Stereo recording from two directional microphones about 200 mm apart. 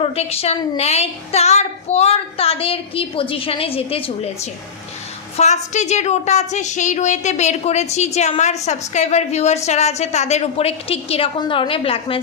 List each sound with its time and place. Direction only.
0.0 s a woman's voice: 30° left (ahead or behind)